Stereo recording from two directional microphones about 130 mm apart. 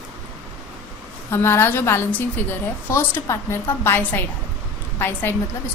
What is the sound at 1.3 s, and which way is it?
A woman's voice, 20° left (ahead or behind).